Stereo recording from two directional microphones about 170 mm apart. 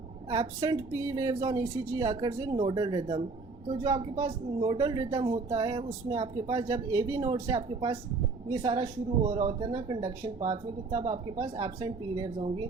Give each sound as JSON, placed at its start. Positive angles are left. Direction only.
{"t": 0.3, "sound": "speech", "side_deg": -25}